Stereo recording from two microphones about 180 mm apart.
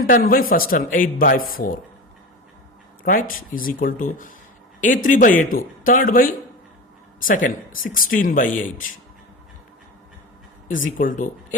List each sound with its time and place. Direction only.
0.1 s speech: 55° left (ahead or behind)
3.0 s speech: 50° left (ahead or behind)
10.7 s speech: 45° left (ahead or behind)